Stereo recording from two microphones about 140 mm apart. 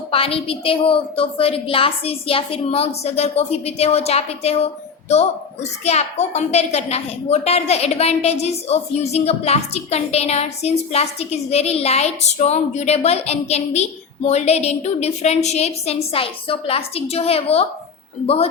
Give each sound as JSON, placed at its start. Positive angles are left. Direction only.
{"t": 0.1, "sound": "a child's voice", "side_deg": 40}
{"t": 5.8, "sound": "a child's voice", "side_deg": 50}